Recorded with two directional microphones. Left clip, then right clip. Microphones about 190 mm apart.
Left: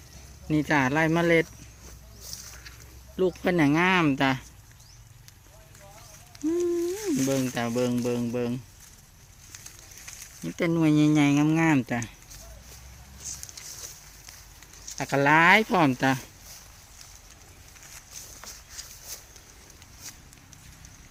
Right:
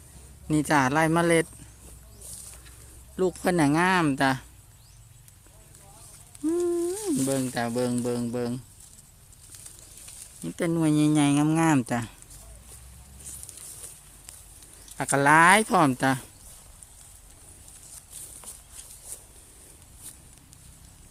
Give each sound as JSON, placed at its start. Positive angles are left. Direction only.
{"t": 0.4, "sound": "speech", "side_deg": -10}
{"t": 3.2, "sound": "speech", "side_deg": -10}
{"t": 7.1, "sound": "speech", "side_deg": 0}
{"t": 10.4, "sound": "speech", "side_deg": 0}
{"t": 14.9, "sound": "speech", "side_deg": -10}